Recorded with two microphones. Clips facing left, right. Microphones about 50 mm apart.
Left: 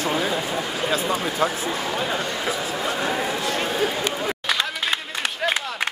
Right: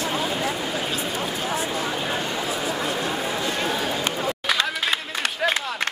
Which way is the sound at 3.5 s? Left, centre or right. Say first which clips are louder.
Left 1 dB; left.